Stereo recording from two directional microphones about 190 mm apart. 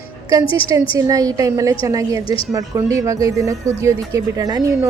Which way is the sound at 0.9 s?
20° right (ahead or behind).